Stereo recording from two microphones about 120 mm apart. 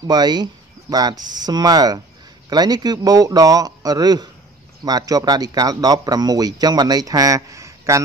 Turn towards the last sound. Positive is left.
turn(degrees=-25)  # may be behind; listen again after turning